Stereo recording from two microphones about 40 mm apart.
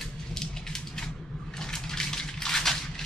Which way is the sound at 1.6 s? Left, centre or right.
Centre.